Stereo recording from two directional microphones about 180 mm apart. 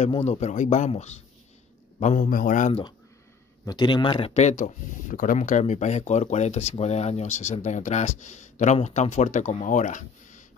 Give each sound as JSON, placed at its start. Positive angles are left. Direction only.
{"t": 0.1, "sound": "speech", "side_deg": 40}
{"t": 3.6, "sound": "speech", "side_deg": 25}